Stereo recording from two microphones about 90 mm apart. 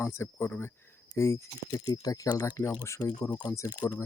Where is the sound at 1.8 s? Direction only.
45° left (ahead or behind).